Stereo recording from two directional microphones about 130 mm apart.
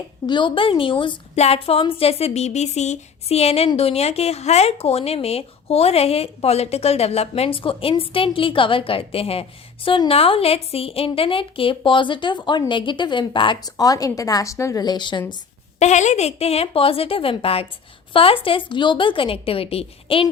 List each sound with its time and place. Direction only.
0.3 s a woman's voice: 40° left (ahead or behind)
1.4 s speech: 50° left (ahead or behind)
15.8 s speech: 65° left (ahead or behind); by 20.2 s 45° left (ahead or behind)